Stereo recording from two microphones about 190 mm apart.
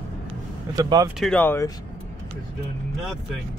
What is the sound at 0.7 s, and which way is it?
Speech, 20° right (ahead or behind).